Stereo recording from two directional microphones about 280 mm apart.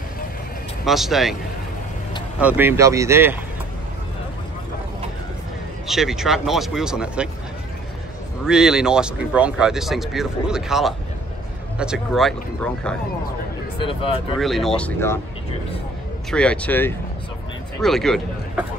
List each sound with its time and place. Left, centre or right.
0.8 s speech: centre
2.4 s speech: centre
5.9 s speech: centre
8.5 s speech: centre
13.7 s speech: centre
14.4 s speech: centre
16.3 s speech: centre